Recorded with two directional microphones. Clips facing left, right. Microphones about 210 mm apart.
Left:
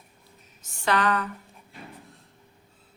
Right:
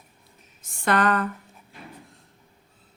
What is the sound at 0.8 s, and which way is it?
Speech, 50° right (ahead or behind).